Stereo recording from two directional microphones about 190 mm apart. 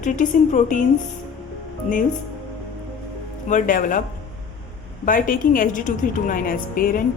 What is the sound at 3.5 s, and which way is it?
Speech, 45° left (ahead or behind).